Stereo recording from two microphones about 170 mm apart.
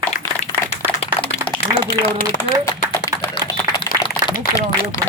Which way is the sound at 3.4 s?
20° left (ahead or behind).